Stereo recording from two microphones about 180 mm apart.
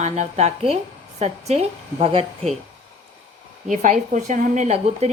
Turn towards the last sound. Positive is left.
turn(degrees=-40)  # may be behind; listen again after turning